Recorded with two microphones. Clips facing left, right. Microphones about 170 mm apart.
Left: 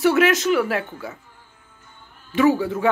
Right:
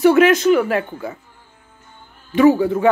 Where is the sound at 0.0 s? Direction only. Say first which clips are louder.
Right 5 dB; centre (ahead or behind).